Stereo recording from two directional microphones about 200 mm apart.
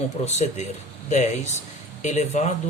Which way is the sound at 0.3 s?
35° left (ahead or behind).